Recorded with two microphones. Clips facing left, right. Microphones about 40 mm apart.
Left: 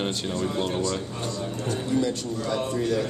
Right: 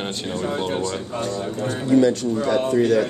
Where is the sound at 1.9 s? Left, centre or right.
Right.